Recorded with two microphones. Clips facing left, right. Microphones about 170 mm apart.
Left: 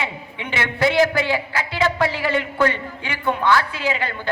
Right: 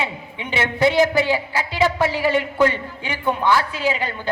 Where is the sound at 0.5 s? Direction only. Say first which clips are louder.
Right 1 dB; 20° right (ahead or behind).